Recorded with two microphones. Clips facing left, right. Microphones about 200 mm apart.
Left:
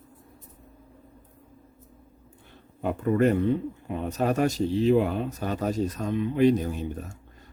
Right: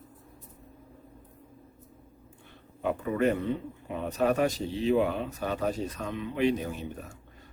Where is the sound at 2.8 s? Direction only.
45° left (ahead or behind).